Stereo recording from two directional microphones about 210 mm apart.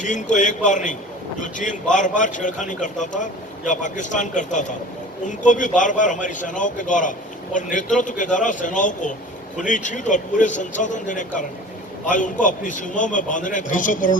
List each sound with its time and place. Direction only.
0.0 s a man's voice: 35° left (ahead or behind)